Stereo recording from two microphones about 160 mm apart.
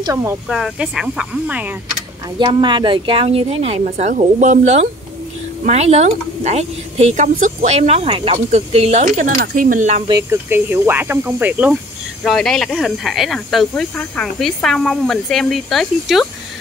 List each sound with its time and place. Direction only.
0.0 s speech: 15° right (ahead or behind)
0.5 s speech: centre (ahead or behind)
2.3 s speech: 30° right (ahead or behind)
9.2 s speech: 60° right (ahead or behind)
10.3 s speech: 15° right (ahead or behind)
12.2 s speech: centre (ahead or behind)